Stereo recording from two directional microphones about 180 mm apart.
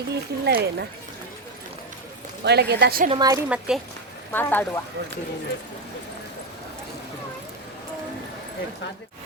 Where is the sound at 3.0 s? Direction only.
25° right (ahead or behind).